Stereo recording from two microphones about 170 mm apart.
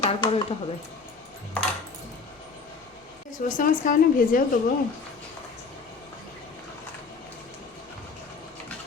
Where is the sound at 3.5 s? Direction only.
50° left (ahead or behind).